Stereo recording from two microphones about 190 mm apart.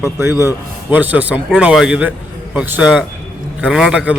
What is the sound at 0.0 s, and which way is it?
A man's voice, 15° right (ahead or behind).